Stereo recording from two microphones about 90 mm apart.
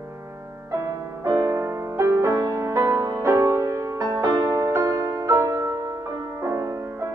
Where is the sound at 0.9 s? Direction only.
40° right (ahead or behind).